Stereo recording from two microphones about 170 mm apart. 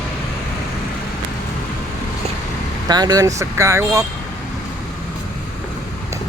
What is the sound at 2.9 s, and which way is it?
Speech, 25° right (ahead or behind).